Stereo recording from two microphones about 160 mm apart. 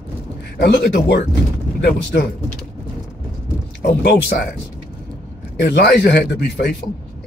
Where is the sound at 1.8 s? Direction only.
75° left (ahead or behind).